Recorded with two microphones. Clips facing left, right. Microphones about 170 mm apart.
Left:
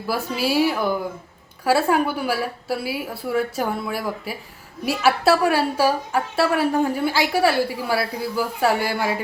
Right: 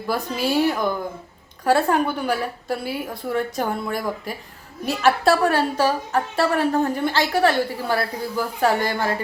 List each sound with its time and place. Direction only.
0.1 s a woman's voice: 5° left (ahead or behind)